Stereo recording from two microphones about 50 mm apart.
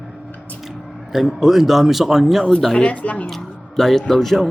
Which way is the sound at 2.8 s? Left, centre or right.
Left.